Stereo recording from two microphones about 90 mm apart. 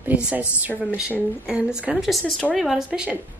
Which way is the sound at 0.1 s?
15° right (ahead or behind).